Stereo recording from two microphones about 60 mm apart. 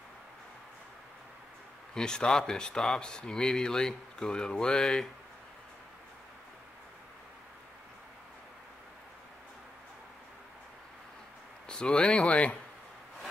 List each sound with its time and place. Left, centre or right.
2.0 s speech: centre
11.6 s speech: centre